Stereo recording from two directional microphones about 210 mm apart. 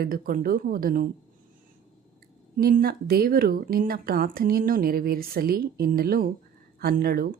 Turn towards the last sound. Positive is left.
turn(degrees=-45)  # may be behind; listen again after turning